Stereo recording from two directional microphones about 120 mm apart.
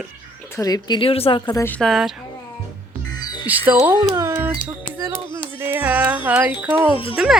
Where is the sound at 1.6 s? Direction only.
10° left (ahead or behind).